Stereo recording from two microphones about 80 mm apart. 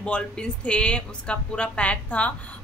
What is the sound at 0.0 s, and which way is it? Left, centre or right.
Speech, centre.